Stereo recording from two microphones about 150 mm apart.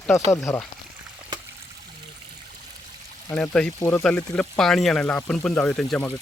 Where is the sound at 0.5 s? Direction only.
10° left (ahead or behind).